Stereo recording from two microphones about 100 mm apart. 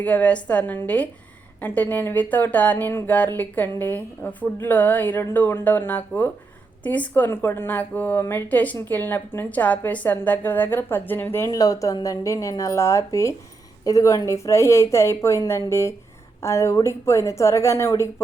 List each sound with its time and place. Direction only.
0.0 s speech: 15° left (ahead or behind)
11.5 s a woman's voice: 35° left (ahead or behind)